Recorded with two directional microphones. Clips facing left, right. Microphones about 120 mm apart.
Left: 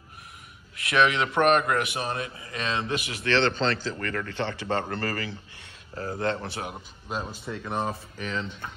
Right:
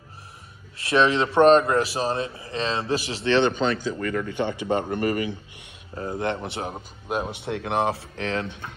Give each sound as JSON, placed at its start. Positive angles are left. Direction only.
{"t": 0.7, "sound": "a man's voice", "side_deg": -25}
{"t": 7.2, "sound": "speech", "side_deg": -70}